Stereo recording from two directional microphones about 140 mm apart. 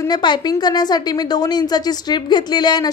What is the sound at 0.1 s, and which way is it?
A woman's voice, 30° left (ahead or behind).